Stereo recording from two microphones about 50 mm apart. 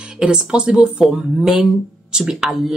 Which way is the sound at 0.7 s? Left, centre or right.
Centre.